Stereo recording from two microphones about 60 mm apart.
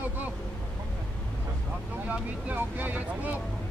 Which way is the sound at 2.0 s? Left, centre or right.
Right.